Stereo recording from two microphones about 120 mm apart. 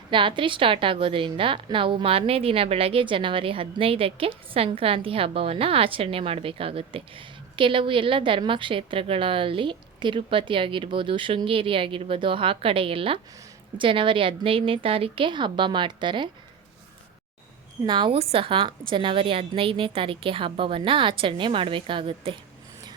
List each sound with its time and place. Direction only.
0.1 s a woman's voice: 45° right (ahead or behind)
17.8 s a woman's voice: 40° right (ahead or behind)
18.2 s a woman's voice: 50° right (ahead or behind)